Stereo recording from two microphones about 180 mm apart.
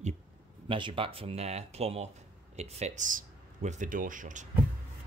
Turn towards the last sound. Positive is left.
turn(degrees=-45)  # may be behind; listen again after turning